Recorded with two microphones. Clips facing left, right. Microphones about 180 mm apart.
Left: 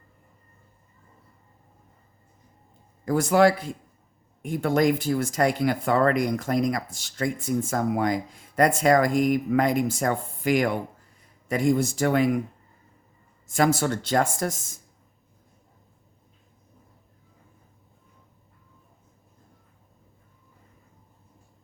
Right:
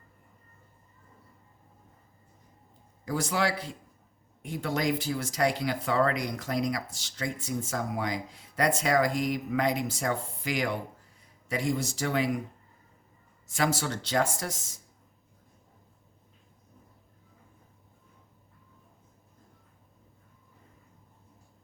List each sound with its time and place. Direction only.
3.0 s speech: 50° left (ahead or behind)
13.5 s speech: 50° left (ahead or behind)